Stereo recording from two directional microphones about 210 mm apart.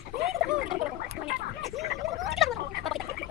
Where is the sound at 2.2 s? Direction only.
Centre (ahead or behind).